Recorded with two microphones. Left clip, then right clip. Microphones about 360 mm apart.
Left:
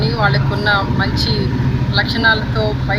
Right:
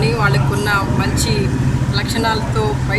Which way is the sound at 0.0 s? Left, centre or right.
Centre.